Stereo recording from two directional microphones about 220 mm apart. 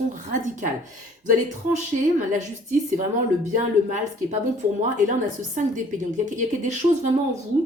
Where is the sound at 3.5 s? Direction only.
35° right (ahead or behind).